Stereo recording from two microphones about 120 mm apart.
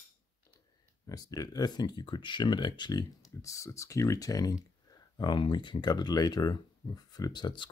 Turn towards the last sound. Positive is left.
turn(degrees=40)  # may be behind; listen again after turning